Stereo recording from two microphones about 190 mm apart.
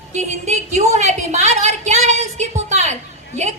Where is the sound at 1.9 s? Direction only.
35° right (ahead or behind).